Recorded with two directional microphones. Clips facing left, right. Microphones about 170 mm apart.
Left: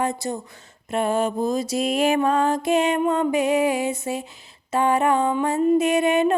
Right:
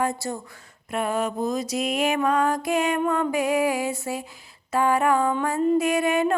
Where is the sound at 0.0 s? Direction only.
20° left (ahead or behind).